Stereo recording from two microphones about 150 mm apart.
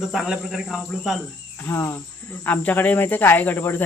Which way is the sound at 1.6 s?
15° left (ahead or behind).